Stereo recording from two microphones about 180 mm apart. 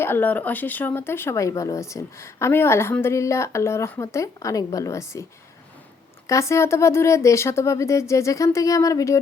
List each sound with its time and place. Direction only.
0.0 s speech: 10° left (ahead or behind)
6.2 s speech: 15° left (ahead or behind)